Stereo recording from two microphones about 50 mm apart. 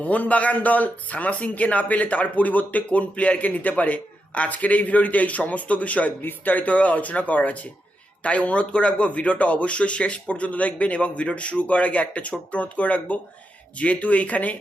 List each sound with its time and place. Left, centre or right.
0.0 s speech: left